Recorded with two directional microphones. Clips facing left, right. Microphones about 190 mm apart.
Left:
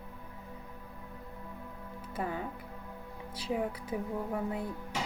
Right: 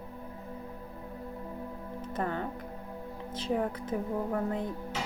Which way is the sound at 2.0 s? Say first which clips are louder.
Right 3 dB; 10° left (ahead or behind).